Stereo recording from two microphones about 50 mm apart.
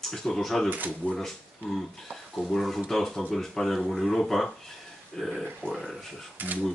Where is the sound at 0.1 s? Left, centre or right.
Centre.